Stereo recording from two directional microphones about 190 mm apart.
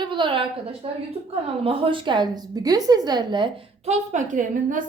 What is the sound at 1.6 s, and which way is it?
A woman's voice, 30° right (ahead or behind).